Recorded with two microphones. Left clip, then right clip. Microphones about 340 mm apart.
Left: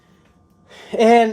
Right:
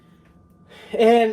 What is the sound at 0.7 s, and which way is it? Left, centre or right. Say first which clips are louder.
Speech: left 3 dB; left.